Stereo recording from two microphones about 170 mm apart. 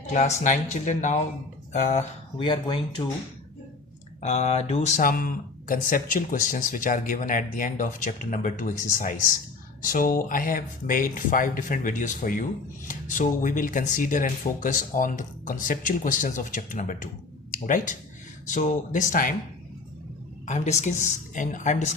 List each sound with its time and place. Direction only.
0.1 s speech: 45° left (ahead or behind)
2.4 s speech: 30° left (ahead or behind)
4.2 s speech: 40° left (ahead or behind)
20.4 s speech: 45° left (ahead or behind)